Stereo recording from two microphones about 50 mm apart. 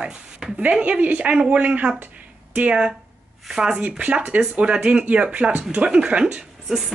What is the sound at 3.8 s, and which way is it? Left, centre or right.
A woman's voice, right.